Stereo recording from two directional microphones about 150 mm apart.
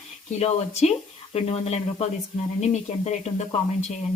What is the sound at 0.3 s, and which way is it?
Speech, 45° left (ahead or behind).